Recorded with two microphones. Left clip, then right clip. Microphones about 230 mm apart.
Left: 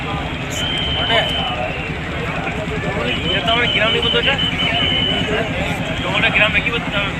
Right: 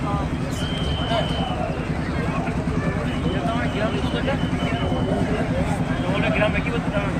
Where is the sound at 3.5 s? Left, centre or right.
Left.